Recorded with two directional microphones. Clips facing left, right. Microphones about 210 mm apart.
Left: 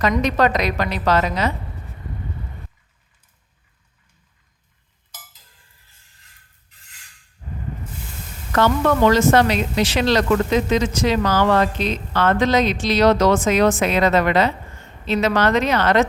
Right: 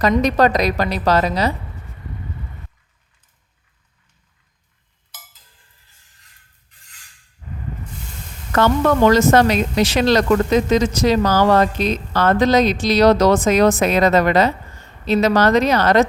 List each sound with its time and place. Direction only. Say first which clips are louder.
0.0 s speech: right 3 dB; 40° right (ahead or behind)
8.5 s speech: right 2 dB; 45° right (ahead or behind)